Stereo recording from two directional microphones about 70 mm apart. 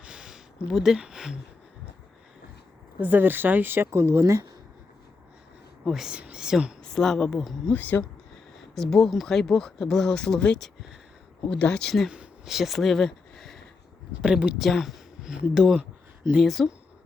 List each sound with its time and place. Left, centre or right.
0.0 s a sound: centre
3.0 s speech: right
5.8 s speech: centre
6.8 s speech: centre
7.7 s speech: left
8.7 s speech: centre
12.5 s speech: centre
14.1 s speech: centre
14.6 s speech: centre